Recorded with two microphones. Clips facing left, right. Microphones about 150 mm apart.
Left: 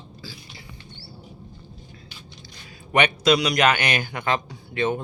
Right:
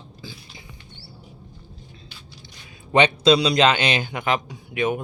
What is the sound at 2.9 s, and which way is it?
Speech, 25° right (ahead or behind).